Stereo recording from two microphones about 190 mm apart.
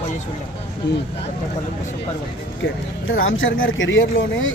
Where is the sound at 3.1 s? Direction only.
90° left.